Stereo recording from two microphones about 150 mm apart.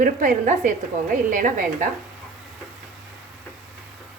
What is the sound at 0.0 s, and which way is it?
Speech, 60° right (ahead or behind).